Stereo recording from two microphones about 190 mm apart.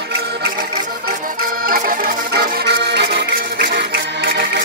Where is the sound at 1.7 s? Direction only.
50° right (ahead or behind).